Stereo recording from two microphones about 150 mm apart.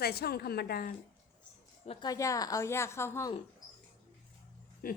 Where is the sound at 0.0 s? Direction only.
90° left.